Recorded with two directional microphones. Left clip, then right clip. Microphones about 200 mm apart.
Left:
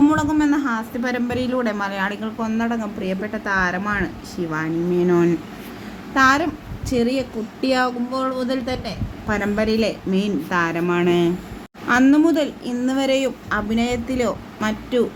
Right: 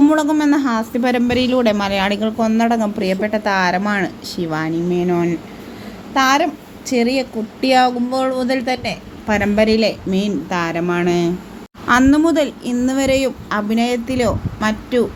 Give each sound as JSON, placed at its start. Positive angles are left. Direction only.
{"t": 0.0, "sound": "a woman's voice", "side_deg": -20}
{"t": 5.0, "sound": "speech", "side_deg": 0}
{"t": 6.1, "sound": "speech", "side_deg": -10}